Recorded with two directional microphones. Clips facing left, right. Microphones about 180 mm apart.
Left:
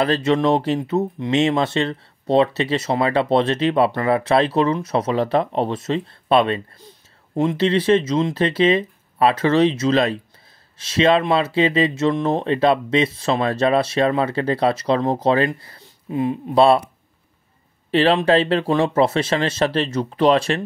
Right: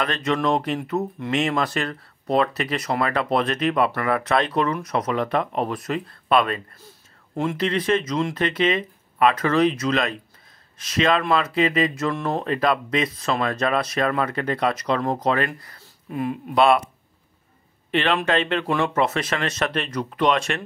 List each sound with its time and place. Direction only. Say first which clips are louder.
0.0 s speech: left 5 dB; 30° left (ahead or behind)
17.9 s speech: left 6 dB; 35° left (ahead or behind)